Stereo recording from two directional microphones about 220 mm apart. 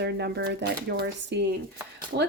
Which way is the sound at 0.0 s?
50° right (ahead or behind).